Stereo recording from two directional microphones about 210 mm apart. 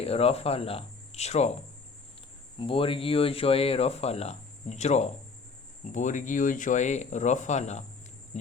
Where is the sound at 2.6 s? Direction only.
25° left (ahead or behind).